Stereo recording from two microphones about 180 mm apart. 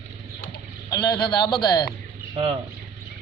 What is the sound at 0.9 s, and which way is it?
A man's voice, 20° left (ahead or behind).